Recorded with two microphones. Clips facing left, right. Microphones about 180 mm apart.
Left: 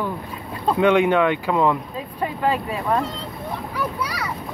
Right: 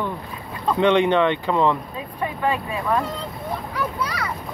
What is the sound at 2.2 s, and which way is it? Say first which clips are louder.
Speech: left 1 dB; 30° left (ahead or behind).